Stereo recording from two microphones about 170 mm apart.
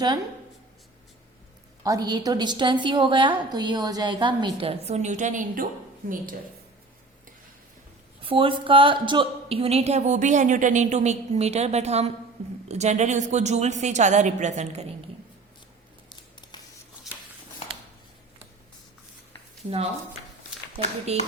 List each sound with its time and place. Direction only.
1.8 s a woman's voice: 20° right (ahead or behind); by 6.2 s 55° right (ahead or behind)
8.2 s a woman's voice: 30° right (ahead or behind)
16.0 s scissors: 25° left (ahead or behind)
21.1 s a woman's voice: 40° right (ahead or behind)